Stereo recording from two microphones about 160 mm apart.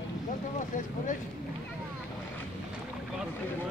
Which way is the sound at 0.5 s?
55° left (ahead or behind).